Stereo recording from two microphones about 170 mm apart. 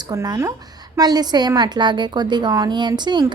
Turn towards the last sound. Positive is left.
turn(degrees=-25)  # may be behind; listen again after turning